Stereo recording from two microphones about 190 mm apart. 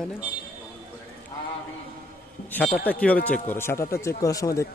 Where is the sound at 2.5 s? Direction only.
5° left (ahead or behind).